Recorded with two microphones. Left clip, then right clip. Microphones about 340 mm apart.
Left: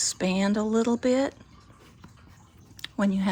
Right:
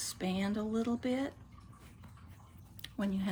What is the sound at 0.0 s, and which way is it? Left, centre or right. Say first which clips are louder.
Speech: left 11 dB; left.